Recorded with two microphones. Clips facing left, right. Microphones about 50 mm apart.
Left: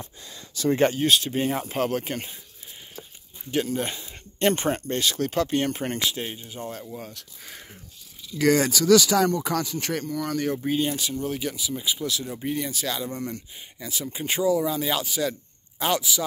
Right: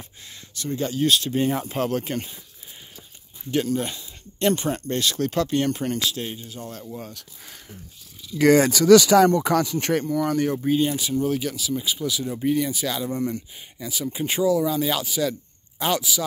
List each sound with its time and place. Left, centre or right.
0.9 s speech: centre
3.5 s speech: centre
3.8 s speech: left
4.8 s speech: centre
8.4 s speech: right
8.7 s speech: right
9.8 s speech: right
10.0 s speech: centre
10.6 s speech: centre